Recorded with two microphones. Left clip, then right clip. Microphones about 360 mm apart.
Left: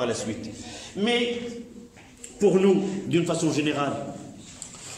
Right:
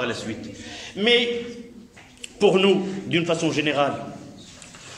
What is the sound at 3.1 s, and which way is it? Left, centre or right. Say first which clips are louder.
Speech: right 3 dB; centre.